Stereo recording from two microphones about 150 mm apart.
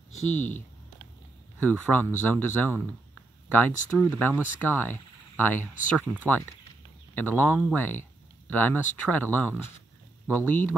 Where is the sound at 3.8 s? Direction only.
10° left (ahead or behind).